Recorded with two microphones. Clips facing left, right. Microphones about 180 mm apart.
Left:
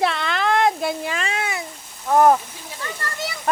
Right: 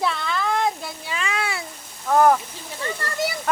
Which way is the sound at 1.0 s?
50° left (ahead or behind).